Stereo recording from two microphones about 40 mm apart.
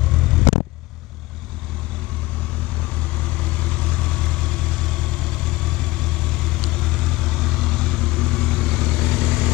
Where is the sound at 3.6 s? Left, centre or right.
Left.